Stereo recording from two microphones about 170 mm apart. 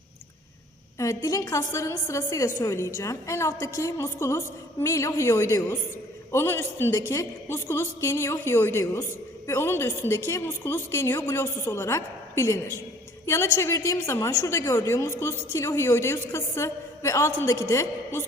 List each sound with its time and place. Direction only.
0.9 s a woman's voice: 20° left (ahead or behind)